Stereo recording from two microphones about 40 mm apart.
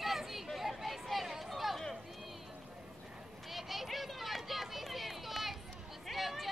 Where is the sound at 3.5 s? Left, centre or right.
Centre.